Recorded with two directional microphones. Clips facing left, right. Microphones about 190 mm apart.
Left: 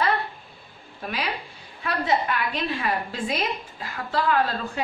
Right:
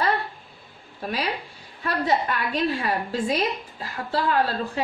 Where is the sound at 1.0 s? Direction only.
35° right (ahead or behind).